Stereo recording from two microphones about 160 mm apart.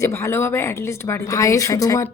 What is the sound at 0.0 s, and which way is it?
A woman's voice, 15° left (ahead or behind).